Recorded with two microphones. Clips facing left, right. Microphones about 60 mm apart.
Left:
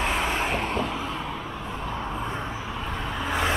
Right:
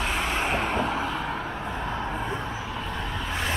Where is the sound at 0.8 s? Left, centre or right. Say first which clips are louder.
Right 2 dB; right.